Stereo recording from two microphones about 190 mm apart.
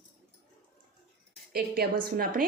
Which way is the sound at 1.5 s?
55° right (ahead or behind).